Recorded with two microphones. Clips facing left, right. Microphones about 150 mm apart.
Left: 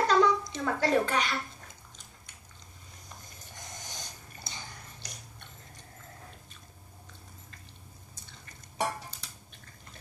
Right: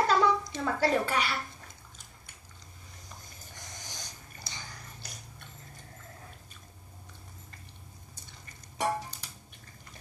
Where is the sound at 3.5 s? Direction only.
20° left (ahead or behind).